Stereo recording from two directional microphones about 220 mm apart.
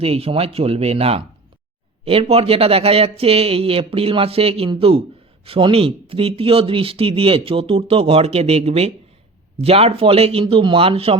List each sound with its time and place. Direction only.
0.0 s speech: 25° right (ahead or behind)